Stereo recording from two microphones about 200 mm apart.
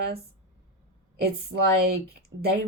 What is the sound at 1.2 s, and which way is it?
Speech, 55° right (ahead or behind).